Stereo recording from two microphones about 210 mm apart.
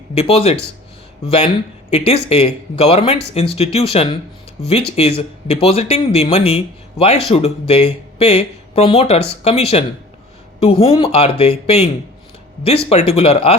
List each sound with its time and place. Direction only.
0.1 s speech: 30° left (ahead or behind)
12.9 s speech: 30° left (ahead or behind)